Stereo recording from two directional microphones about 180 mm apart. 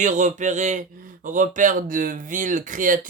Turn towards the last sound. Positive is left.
turn(degrees=-45)  # may be behind; listen again after turning